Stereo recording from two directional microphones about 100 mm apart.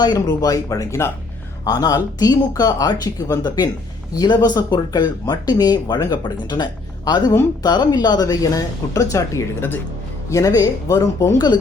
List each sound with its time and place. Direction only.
0.0 s speech: 40° left (ahead or behind)
1.6 s speech: 40° left (ahead or behind); by 9.8 s 20° left (ahead or behind)
10.2 s speech: 35° left (ahead or behind)